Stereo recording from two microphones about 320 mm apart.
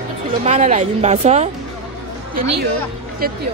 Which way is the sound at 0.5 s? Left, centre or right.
Right.